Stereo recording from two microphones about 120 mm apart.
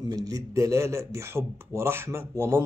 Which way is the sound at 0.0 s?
30° right (ahead or behind).